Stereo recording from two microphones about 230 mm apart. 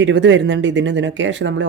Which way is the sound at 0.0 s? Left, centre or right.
Right.